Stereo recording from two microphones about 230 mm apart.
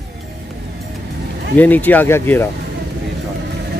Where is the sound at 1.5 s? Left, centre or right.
Centre.